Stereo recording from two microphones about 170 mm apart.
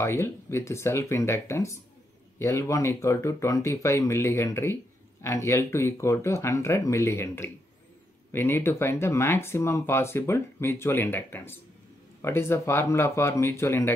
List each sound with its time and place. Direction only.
0.0 s speech: 15° left (ahead or behind)